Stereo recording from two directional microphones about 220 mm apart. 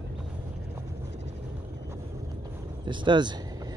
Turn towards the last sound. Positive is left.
turn(degrees=-20)  # may be behind; listen again after turning